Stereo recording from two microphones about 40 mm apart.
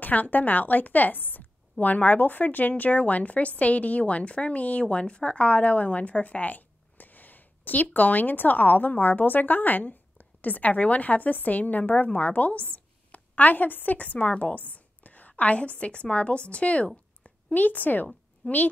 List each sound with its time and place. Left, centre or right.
0.0 s a woman's voice: left